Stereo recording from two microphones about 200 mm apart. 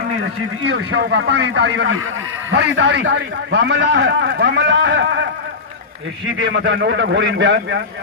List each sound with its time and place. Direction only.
0.7 s a man's voice: 60° right (ahead or behind)